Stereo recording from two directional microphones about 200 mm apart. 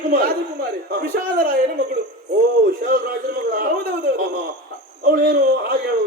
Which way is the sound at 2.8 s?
50° right (ahead or behind).